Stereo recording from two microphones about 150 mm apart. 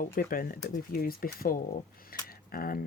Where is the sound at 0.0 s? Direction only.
70° left (ahead or behind).